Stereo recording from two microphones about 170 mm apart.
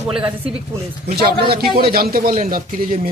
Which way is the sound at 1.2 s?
65° right (ahead or behind).